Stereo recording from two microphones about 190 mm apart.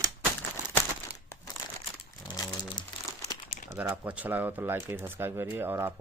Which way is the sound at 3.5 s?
45° left (ahead or behind).